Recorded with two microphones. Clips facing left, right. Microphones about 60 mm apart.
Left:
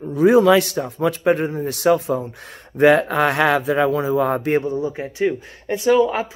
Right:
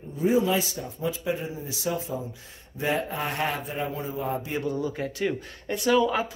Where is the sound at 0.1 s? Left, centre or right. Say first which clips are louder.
Left 10 dB; left.